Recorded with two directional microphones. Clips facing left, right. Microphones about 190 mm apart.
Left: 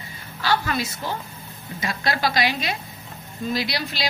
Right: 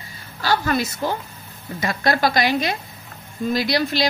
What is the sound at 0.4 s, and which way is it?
A woman's voice, 45° right (ahead or behind).